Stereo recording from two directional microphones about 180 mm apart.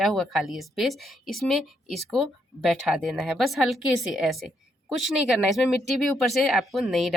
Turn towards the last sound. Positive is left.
turn(degrees=0)  # may be behind; listen again after turning